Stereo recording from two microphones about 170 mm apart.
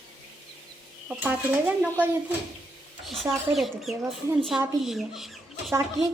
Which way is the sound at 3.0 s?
Centre (ahead or behind).